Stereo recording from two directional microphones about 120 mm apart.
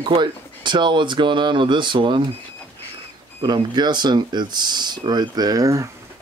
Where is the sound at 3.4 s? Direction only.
35° right (ahead or behind).